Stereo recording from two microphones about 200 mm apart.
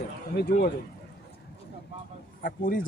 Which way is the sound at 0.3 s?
50° left (ahead or behind).